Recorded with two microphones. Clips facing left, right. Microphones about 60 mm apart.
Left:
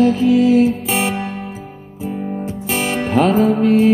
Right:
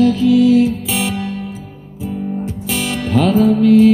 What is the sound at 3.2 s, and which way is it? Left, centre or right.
Music, left.